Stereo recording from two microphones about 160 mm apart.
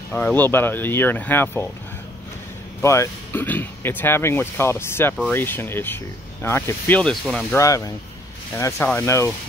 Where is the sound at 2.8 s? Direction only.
15° left (ahead or behind).